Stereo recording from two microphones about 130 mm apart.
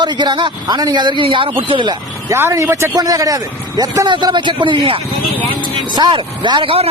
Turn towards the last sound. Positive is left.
turn(degrees=-40)  # may be behind; listen again after turning